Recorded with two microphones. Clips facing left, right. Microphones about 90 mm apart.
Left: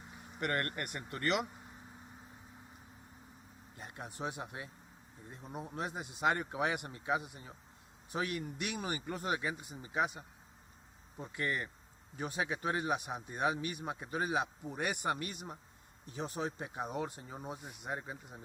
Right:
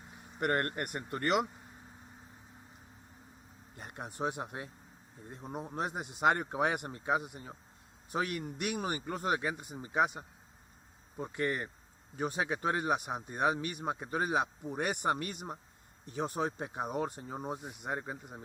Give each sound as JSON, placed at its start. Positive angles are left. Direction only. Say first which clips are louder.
{"t": 0.9, "sound": "speech", "louder": "right 4 dB", "side_deg": -35}
{"t": 3.8, "sound": "speech", "louder": "right 5 dB", "side_deg": -55}
{"t": 5.7, "sound": "speech", "louder": "right 4 dB", "side_deg": -45}
{"t": 11.2, "sound": "speech", "louder": "right 3 dB", "side_deg": -40}
{"t": 17.1, "sound": "speech", "louder": "right 5 dB", "side_deg": -40}